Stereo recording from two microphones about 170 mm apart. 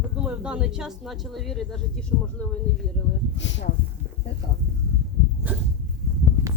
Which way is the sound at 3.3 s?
90° left.